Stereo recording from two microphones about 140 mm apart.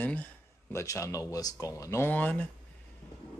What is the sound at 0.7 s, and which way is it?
Speech, 20° left (ahead or behind).